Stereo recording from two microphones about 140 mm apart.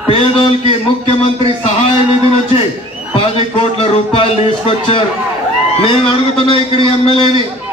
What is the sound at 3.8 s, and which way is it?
Music, 40° left (ahead or behind).